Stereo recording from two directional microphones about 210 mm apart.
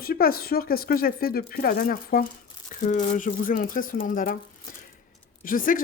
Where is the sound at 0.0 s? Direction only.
45° left (ahead or behind).